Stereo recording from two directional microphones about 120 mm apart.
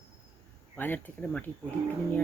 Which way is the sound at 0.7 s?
15° left (ahead or behind).